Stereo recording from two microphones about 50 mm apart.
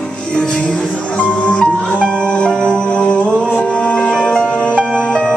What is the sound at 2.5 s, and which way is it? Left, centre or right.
Music, centre.